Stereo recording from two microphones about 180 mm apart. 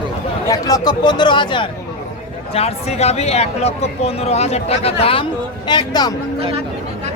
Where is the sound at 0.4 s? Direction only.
20° left (ahead or behind).